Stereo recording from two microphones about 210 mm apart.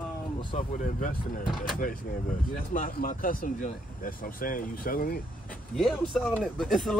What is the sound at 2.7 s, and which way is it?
Speech, 40° left (ahead or behind).